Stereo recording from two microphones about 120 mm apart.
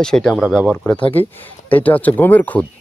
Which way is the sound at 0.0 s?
5° left (ahead or behind).